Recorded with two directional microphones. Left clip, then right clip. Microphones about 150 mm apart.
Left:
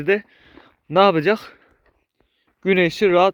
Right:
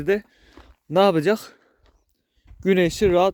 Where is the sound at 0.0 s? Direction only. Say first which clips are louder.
Left 3 dB; 25° right (ahead or behind).